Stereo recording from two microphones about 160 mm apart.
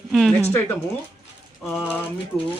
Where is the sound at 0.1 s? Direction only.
Centre (ahead or behind).